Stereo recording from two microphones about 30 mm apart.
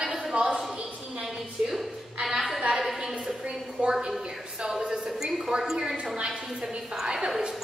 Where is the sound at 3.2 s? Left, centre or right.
Right.